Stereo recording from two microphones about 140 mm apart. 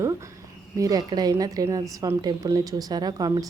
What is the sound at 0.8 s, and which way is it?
A woman's voice, 25° right (ahead or behind).